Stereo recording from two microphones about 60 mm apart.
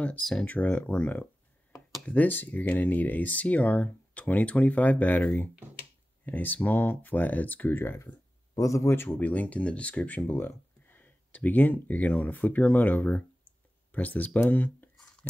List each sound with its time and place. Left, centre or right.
0.2 s speech: centre
0.5 s speech: left
8.5 s speech: left
8.9 s speech: left